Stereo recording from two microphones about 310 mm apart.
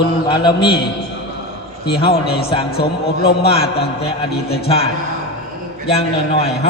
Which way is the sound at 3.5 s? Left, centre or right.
Centre.